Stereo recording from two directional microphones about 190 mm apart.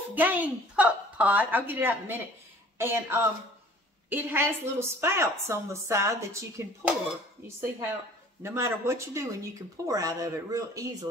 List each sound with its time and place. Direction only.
0.1 s a woman's voice: 10° right (ahead or behind)
8.4 s a woman's voice: 15° right (ahead or behind)